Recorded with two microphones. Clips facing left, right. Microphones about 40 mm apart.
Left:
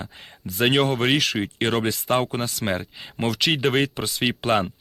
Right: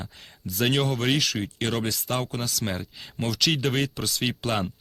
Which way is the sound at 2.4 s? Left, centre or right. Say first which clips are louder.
Left 4 dB; centre.